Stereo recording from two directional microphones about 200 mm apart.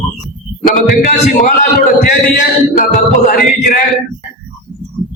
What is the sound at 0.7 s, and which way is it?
A man's voice, 45° left (ahead or behind).